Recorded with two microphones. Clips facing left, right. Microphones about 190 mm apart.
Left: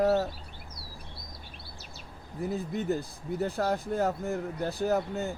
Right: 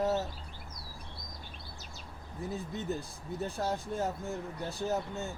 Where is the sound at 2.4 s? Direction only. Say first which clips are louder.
Left 6 dB; 15° left (ahead or behind).